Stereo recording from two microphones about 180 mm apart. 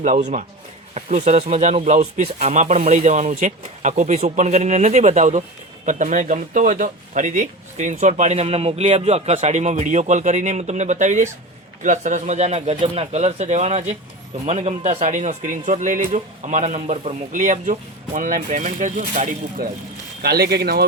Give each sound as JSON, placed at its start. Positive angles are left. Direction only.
{"t": 0.0, "sound": "a man's voice", "side_deg": -40}
{"t": 20.2, "sound": "speech", "side_deg": -60}